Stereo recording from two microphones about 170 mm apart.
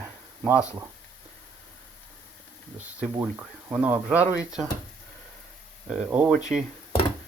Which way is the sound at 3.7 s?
10° right (ahead or behind).